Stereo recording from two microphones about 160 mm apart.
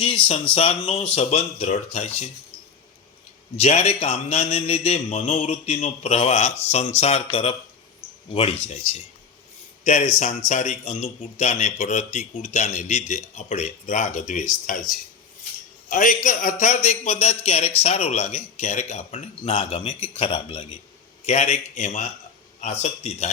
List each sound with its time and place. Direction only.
0.0 s a man's voice: 35° left (ahead or behind)
3.5 s a man's voice: 40° left (ahead or behind)
9.8 s speech: 45° left (ahead or behind)